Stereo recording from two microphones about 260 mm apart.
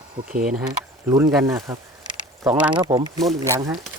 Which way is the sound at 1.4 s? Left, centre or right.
Centre.